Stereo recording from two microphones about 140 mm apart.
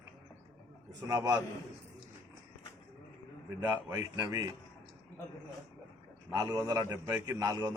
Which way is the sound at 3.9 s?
25° right (ahead or behind).